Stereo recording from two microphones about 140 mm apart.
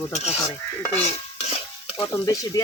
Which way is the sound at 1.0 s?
45° left (ahead or behind).